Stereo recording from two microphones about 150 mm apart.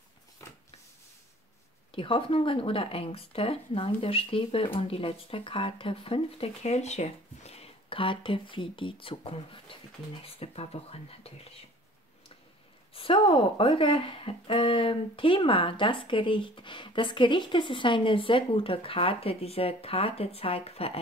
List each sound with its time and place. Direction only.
1.9 s speech: 35° left (ahead or behind)
12.9 s speech: 35° left (ahead or behind)